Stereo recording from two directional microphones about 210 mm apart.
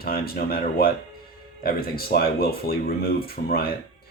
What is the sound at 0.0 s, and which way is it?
Speech, 45° left (ahead or behind).